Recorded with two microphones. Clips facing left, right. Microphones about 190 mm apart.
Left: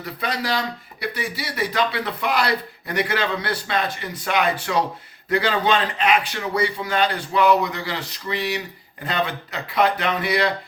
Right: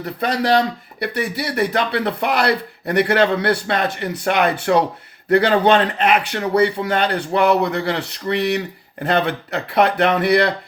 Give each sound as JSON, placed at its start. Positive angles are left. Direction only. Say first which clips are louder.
{"t": 0.0, "sound": "a man's voice", "louder": "right 6 dB", "side_deg": -55}